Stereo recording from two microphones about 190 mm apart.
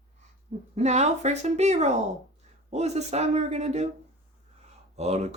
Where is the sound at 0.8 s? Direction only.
35° right (ahead or behind).